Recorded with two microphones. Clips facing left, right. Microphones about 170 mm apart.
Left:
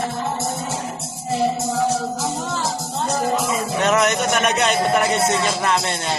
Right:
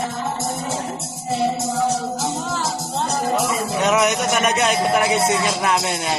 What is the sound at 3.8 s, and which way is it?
A man's voice, 5° right (ahead or behind).